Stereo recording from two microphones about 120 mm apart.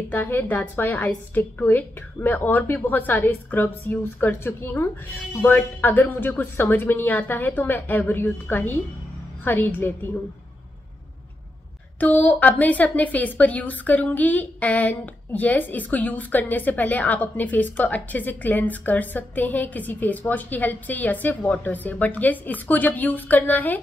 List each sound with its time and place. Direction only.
0.1 s a woman's voice: 15° left (ahead or behind)
12.0 s a woman's voice: 15° left (ahead or behind)